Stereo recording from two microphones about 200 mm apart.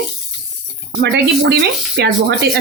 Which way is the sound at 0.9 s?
60° right (ahead or behind).